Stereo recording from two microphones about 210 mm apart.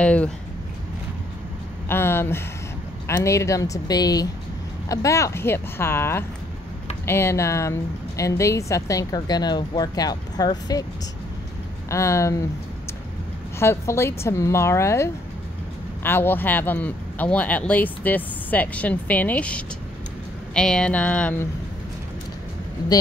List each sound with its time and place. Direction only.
0.0 s speech: 5° left (ahead or behind)
1.9 s a woman's voice: 10° left (ahead or behind)
11.9 s a woman's voice: 15° left (ahead or behind)
13.6 s a woman's voice: 10° left (ahead or behind)